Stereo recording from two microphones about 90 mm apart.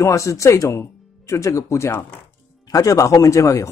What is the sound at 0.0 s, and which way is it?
Speech, 35° left (ahead or behind).